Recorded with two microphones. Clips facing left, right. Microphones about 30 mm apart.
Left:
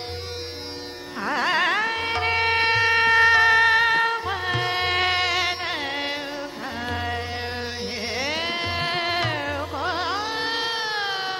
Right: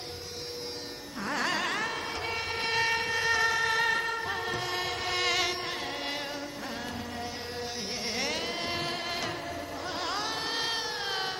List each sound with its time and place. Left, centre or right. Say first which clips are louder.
1.2 s music: left 8 dB; left
2.0 s music: left 11 dB; left
2.7 s shofar: left 8 dB; left
3.0 s music: left 11 dB; left
5.2 s music: left 5 dB; left
5.5 s carnatic music: left 7 dB; left
8.4 s music: left 7 dB; left
10.3 s a sound: left 6 dB; left
10.8 s a sound: left 8 dB; left
11.1 s a sound: left 5 dB; left